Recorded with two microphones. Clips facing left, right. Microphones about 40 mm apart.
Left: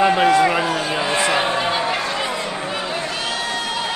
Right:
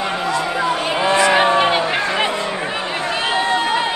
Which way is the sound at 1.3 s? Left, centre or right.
Right.